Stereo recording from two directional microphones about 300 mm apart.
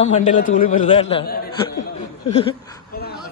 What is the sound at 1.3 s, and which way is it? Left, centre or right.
Speech, left.